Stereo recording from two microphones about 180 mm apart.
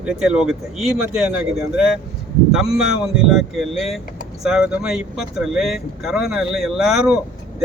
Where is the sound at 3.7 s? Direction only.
35° left (ahead or behind).